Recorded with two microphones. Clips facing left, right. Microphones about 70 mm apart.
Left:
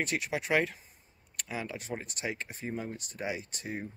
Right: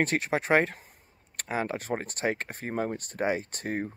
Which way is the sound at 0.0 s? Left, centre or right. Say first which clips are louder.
Right 6 dB; right.